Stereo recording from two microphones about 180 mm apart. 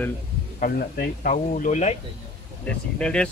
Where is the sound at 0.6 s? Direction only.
50° left (ahead or behind).